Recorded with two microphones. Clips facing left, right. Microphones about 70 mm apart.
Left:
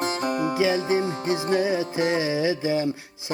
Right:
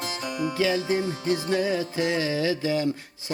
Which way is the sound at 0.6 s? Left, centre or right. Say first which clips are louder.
Left 1 dB; left.